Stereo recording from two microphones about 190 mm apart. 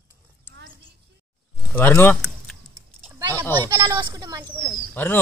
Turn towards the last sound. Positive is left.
turn(degrees=0)  # may be behind; listen again after turning